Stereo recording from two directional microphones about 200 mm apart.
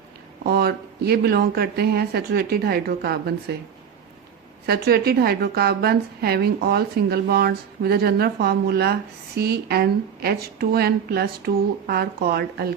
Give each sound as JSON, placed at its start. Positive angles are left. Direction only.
{"t": 0.4, "sound": "a woman's voice", "side_deg": -50}
{"t": 4.6, "sound": "a woman's voice", "side_deg": -50}